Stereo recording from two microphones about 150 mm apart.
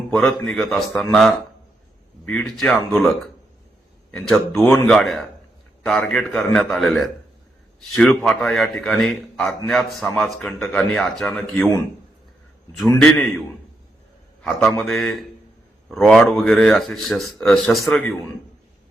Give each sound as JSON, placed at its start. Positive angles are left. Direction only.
{"t": 0.1, "sound": "a man's voice", "side_deg": 5}
{"t": 4.3, "sound": "a man's voice", "side_deg": 5}
{"t": 13.0, "sound": "a man's voice", "side_deg": 5}
{"t": 14.4, "sound": "a man's voice", "side_deg": 5}